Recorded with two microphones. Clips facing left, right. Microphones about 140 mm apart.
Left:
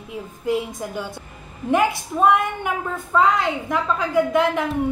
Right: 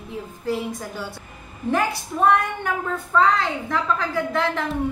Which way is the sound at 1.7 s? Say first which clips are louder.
Left 4 dB; 15° left (ahead or behind).